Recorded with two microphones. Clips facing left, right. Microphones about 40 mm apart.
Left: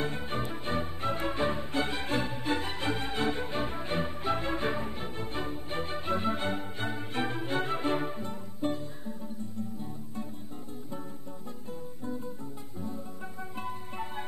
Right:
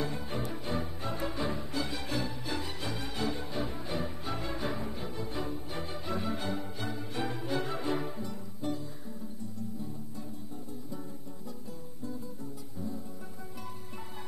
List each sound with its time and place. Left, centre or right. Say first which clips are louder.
0.0 s music: left 2 dB; left